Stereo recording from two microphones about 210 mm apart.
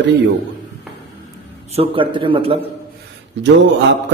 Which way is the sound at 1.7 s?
25° right (ahead or behind).